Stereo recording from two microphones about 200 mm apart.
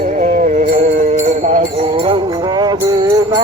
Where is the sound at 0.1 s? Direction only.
40° right (ahead or behind).